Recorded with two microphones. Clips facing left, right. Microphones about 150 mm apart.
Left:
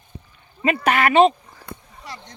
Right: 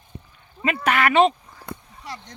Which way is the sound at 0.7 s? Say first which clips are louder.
Left 2 dB; 35° left (ahead or behind).